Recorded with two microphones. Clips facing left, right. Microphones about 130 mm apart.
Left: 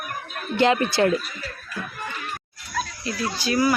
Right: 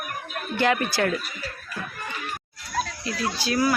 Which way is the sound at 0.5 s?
25° left (ahead or behind).